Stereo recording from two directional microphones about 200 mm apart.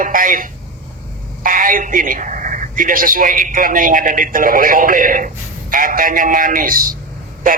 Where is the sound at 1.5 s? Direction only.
40° right (ahead or behind).